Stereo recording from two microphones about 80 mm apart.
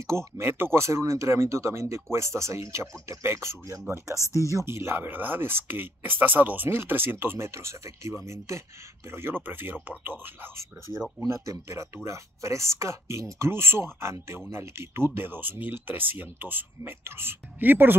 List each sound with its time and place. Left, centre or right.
0.0 s speech: right
4.1 s speech: left
4.5 s speech: right
11.1 s speech: right